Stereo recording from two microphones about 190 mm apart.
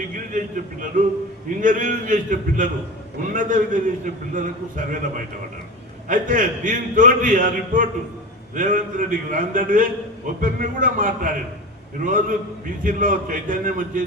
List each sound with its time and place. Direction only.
0.3 s a man's voice: 45° right (ahead or behind)